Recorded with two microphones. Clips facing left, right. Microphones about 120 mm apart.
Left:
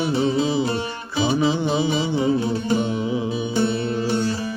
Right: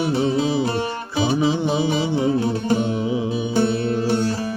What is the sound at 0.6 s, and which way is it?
Music, 55° right (ahead or behind).